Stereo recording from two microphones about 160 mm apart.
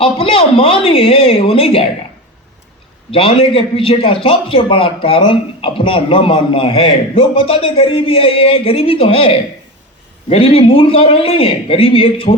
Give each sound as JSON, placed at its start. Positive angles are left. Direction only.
{"t": 0.0, "sound": "a man's voice", "side_deg": 35}
{"t": 3.1, "sound": "a man's voice", "side_deg": 35}